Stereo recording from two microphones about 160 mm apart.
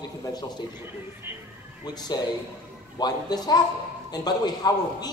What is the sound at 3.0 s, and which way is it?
A man's voice, 25° left (ahead or behind).